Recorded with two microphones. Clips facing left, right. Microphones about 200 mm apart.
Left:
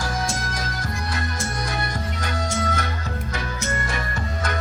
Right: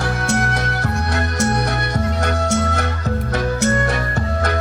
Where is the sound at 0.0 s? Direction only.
65° right (ahead or behind).